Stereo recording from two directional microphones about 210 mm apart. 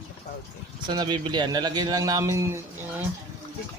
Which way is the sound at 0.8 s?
20° right (ahead or behind).